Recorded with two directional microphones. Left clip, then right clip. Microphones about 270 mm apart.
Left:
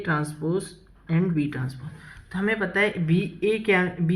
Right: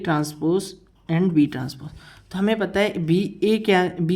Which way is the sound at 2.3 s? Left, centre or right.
Right.